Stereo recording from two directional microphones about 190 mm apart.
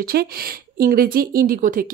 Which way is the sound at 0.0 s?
50° right (ahead or behind).